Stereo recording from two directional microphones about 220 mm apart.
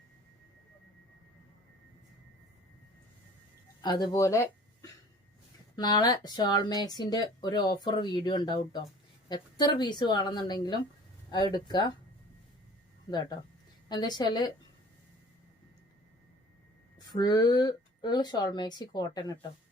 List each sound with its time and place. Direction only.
3.8 s speech: 20° left (ahead or behind)
13.1 s speech: 20° left (ahead or behind)
17.1 s speech: 20° left (ahead or behind)